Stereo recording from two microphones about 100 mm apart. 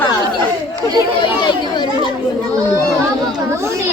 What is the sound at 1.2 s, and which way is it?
Speech, 50° left (ahead or behind).